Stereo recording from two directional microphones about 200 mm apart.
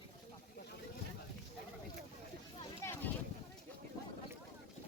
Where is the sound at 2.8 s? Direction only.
15° left (ahead or behind).